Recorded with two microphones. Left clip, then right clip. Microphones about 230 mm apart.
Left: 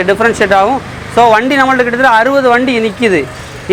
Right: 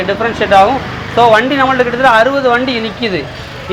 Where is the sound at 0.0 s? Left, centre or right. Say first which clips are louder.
Left 4 dB; left.